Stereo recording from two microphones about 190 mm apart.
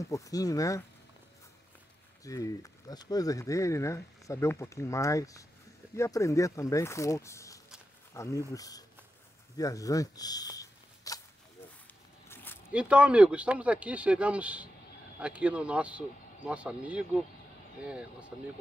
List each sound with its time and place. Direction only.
0.0 s speech: 15° left (ahead or behind)
2.2 s speech: 15° left (ahead or behind)
12.3 s a sound: 10° left (ahead or behind)
12.7 s speech: 5° right (ahead or behind)